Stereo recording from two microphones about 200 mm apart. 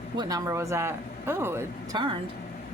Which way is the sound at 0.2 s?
20° right (ahead or behind).